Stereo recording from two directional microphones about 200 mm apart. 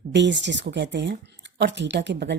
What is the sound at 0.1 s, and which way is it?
Speech, 60° right (ahead or behind).